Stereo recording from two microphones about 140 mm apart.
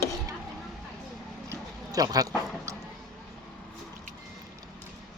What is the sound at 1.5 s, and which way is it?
Speech, 25° right (ahead or behind).